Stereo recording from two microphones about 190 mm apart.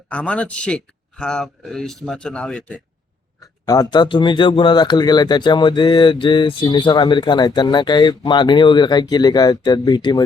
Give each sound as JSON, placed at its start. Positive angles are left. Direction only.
{"t": 0.1, "sound": "speech", "side_deg": 5}
{"t": 3.7, "sound": "speech", "side_deg": 20}